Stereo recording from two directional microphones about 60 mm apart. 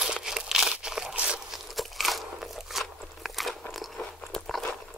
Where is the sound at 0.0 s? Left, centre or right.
Centre.